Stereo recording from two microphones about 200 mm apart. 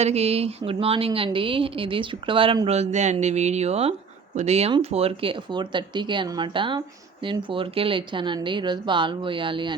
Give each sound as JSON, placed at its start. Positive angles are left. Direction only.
{"t": 0.0, "sound": "speech", "side_deg": -30}